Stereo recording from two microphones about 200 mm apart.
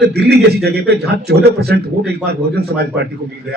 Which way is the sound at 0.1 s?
55° right (ahead or behind).